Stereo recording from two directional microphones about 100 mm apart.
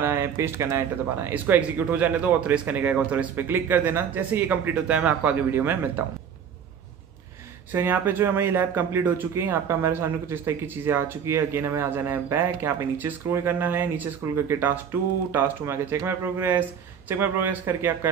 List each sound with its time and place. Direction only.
0.0 s speech: 25° right (ahead or behind)
7.7 s speech: 20° right (ahead or behind)